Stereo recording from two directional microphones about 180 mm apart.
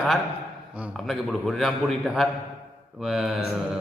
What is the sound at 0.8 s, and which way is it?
A man's voice, centre (ahead or behind).